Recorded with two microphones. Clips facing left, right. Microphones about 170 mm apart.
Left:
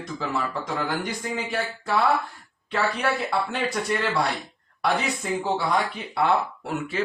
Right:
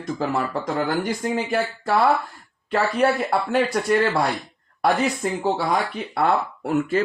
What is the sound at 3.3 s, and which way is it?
Speech, 55° right (ahead or behind).